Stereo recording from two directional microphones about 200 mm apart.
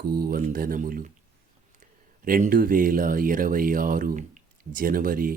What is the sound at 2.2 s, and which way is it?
Speech, 45° right (ahead or behind).